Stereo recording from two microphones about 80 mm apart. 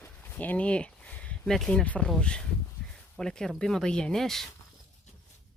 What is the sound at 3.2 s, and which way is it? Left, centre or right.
Speech, centre.